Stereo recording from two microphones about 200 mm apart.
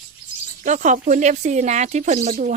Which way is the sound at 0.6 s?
40° right (ahead or behind).